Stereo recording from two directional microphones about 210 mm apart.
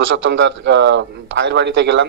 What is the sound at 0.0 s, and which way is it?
A man's voice, 60° right (ahead or behind).